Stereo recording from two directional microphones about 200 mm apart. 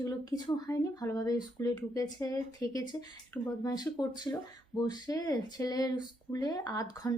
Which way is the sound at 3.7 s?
20° left (ahead or behind).